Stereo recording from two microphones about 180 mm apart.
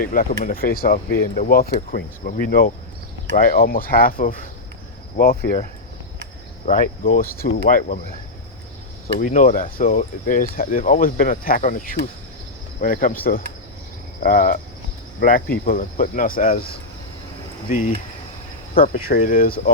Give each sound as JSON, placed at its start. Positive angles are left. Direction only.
{"t": 0.0, "sound": "speech", "side_deg": 50}
{"t": 5.1, "sound": "cricket", "side_deg": 55}
{"t": 6.7, "sound": "speech", "side_deg": 50}
{"t": 9.1, "sound": "speech", "side_deg": 45}
{"t": 14.2, "sound": "speech", "side_deg": 50}